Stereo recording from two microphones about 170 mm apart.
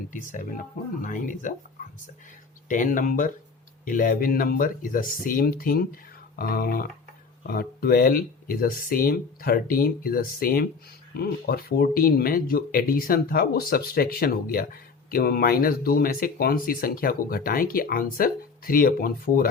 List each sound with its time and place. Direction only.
0.1 s speech: 50° left (ahead or behind)
1.8 s whispering: 50° left (ahead or behind)
2.6 s speech: 50° left (ahead or behind)